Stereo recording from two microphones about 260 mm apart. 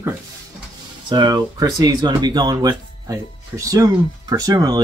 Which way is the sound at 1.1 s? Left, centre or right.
Centre.